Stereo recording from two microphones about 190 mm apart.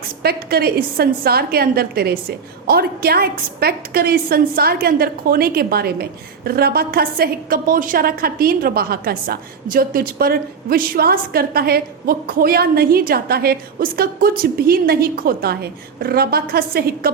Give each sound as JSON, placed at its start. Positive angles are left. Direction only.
{"t": 0.2, "sound": "a woman's voice", "side_deg": -55}